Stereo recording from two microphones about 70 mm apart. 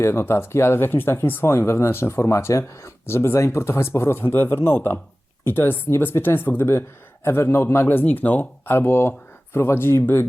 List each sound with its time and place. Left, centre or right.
0.0 s speech: left